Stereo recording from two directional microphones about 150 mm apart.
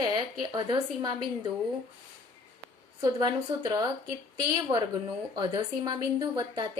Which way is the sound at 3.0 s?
30° right (ahead or behind).